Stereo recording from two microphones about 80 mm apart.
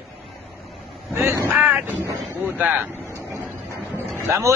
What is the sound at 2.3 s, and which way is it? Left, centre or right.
Vehicle, right.